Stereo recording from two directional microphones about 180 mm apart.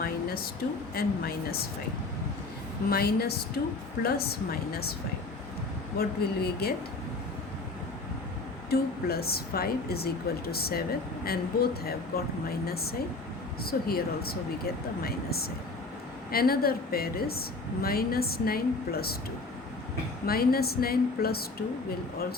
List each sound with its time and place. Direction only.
0.0 s a sound: 55° left (ahead or behind)
0.9 s a woman's voice: 55° left (ahead or behind)
2.9 s a woman's voice: 60° left (ahead or behind)
6.0 s a woman's voice: 60° left (ahead or behind)
8.7 s a woman's voice: 60° left (ahead or behind)
20.2 s a woman's voice: 55° left (ahead or behind)